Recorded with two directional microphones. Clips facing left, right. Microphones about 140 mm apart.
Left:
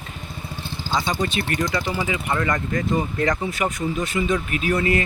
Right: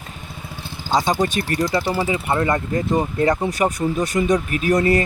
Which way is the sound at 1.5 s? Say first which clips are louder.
Right 4 dB; 35° right (ahead or behind).